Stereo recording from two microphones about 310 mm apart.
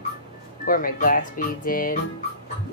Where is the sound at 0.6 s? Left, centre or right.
Left.